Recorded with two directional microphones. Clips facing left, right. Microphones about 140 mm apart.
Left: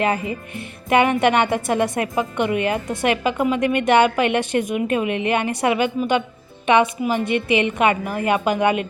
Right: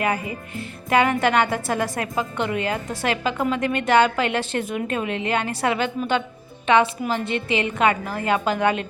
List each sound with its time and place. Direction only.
0.0 s a woman's voice: 25° left (ahead or behind)